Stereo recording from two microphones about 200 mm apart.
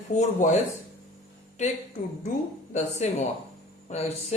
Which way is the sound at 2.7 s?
35° left (ahead or behind).